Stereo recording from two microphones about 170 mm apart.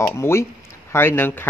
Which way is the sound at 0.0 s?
15° left (ahead or behind).